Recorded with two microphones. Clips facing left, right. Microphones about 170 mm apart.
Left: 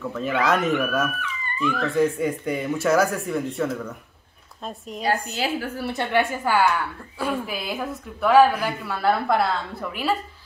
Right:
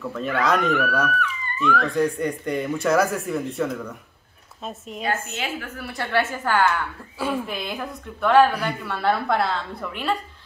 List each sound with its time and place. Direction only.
0.0 s a woman's voice: centre (ahead or behind)
5.0 s a woman's voice: 35° left (ahead or behind)
6.3 s a woman's voice: 10° left (ahead or behind)
7.2 s a woman's voice: centre (ahead or behind)